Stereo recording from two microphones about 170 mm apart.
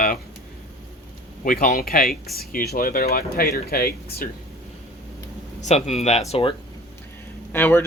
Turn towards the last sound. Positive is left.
turn(degrees=10)  # may be behind; listen again after turning